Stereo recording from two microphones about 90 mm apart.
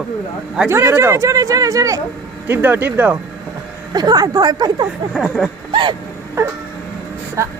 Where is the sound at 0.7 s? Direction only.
30° right (ahead or behind).